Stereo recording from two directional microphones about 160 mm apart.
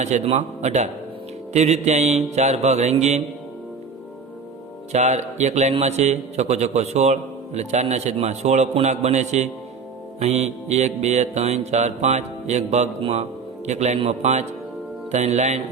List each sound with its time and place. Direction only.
0.0 s a man's voice: 45° right (ahead or behind)
4.9 s a man's voice: 45° right (ahead or behind)